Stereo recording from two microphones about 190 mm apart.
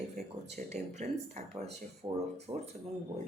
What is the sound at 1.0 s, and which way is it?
Speech, 35° right (ahead or behind).